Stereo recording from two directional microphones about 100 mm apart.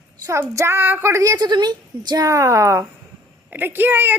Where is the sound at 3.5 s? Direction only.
20° right (ahead or behind).